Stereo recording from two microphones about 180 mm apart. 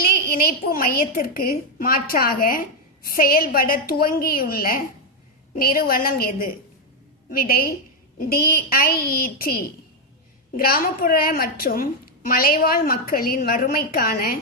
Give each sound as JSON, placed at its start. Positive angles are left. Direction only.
{"t": 0.0, "sound": "a woman's voice", "side_deg": 55}